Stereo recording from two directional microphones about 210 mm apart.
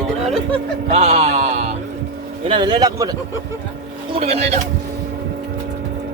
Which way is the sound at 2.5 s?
20° right (ahead or behind).